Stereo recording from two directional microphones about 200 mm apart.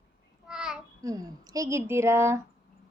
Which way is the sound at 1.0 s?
20° right (ahead or behind).